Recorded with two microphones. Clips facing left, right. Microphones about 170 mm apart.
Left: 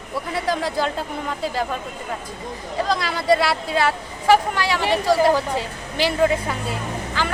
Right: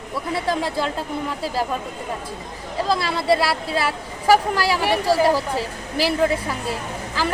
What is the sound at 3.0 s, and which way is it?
Speech, 30° right (ahead or behind).